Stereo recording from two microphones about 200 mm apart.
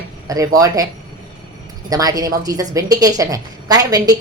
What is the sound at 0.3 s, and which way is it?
Speech, 15° right (ahead or behind).